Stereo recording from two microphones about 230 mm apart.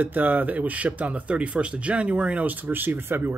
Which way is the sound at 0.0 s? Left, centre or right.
Centre.